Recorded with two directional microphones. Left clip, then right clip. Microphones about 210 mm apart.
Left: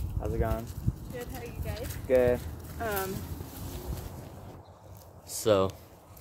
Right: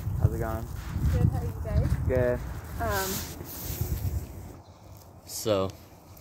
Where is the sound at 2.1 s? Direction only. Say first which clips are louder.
Left 3 dB; 10° right (ahead or behind).